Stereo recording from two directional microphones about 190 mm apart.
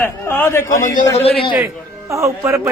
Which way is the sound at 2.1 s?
15° right (ahead or behind).